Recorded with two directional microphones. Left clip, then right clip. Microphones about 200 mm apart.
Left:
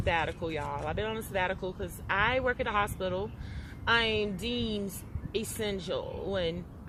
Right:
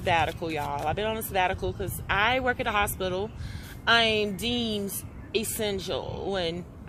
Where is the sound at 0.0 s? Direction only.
35° right (ahead or behind).